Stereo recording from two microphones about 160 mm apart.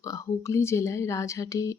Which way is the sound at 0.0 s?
20° left (ahead or behind).